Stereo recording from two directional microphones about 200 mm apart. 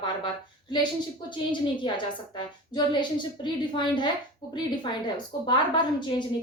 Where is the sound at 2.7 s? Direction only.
20° left (ahead or behind).